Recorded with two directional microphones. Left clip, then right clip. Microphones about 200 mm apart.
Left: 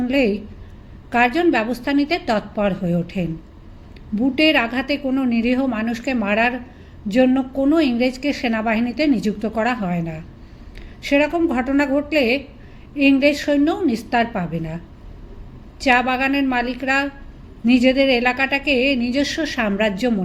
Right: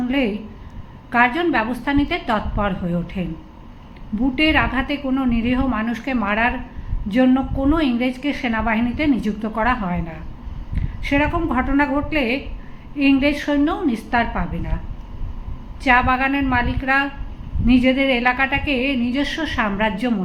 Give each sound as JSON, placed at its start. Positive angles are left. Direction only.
{"t": 0.0, "sound": "a woman's voice", "side_deg": 45}
{"t": 4.4, "sound": "a woman's voice", "side_deg": 45}
{"t": 15.8, "sound": "a woman's voice", "side_deg": 45}